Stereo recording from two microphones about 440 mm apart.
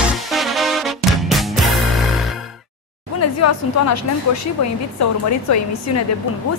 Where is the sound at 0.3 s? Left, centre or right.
Centre.